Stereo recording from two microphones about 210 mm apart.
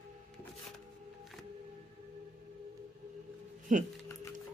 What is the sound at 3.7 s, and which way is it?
Speech, 35° right (ahead or behind).